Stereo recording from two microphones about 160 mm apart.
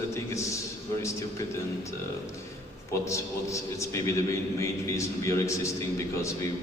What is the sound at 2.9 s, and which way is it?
A man's voice, 20° left (ahead or behind).